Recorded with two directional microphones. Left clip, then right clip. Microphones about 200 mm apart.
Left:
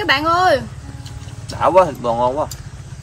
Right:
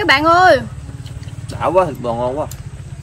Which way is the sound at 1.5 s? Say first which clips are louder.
Left 2 dB; 20° left (ahead or behind).